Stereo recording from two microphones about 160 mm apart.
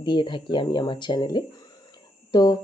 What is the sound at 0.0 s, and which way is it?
Speech, 30° left (ahead or behind).